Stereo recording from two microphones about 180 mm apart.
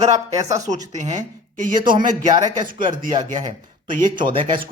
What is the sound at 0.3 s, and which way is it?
Speech, 20° right (ahead or behind).